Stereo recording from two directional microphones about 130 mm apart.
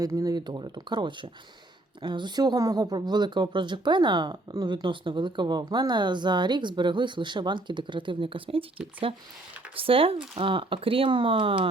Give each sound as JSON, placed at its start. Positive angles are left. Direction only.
{"t": 0.0, "sound": "speech", "side_deg": -25}
{"t": 9.7, "sound": "speech", "side_deg": -45}